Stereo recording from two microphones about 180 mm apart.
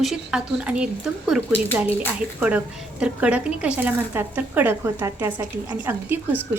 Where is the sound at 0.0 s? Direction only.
Centre (ahead or behind).